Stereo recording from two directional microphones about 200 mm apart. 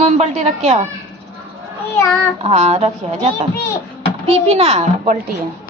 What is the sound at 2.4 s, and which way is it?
A child's voice, 35° right (ahead or behind).